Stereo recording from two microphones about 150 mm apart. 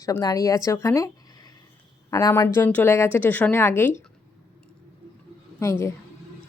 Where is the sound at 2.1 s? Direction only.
20° left (ahead or behind).